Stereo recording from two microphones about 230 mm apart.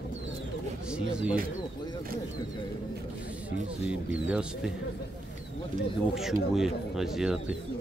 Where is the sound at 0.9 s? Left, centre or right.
Centre.